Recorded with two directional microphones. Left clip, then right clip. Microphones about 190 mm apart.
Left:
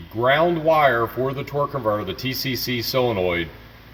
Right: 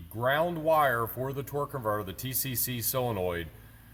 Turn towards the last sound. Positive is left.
turn(degrees=-20)  # may be behind; listen again after turning